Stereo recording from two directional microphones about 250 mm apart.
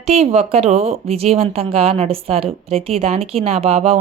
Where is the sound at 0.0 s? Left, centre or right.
Right.